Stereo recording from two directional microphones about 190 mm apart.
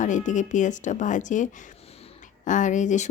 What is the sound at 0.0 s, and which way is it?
Speech, 40° left (ahead or behind).